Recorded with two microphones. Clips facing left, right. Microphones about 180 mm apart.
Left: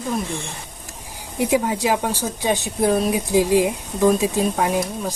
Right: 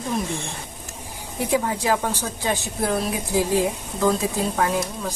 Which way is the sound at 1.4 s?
15° left (ahead or behind).